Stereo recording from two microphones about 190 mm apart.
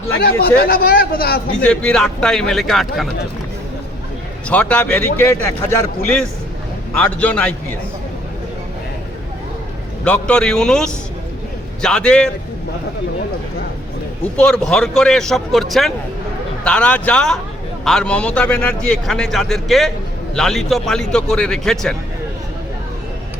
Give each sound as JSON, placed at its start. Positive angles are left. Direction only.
{"t": 0.2, "sound": "speech", "side_deg": 55}
{"t": 1.6, "sound": "a man's voice", "side_deg": 5}
{"t": 4.4, "sound": "speech", "side_deg": 5}
{"t": 10.0, "sound": "a man's voice", "side_deg": 5}
{"t": 14.3, "sound": "a man's voice", "side_deg": 5}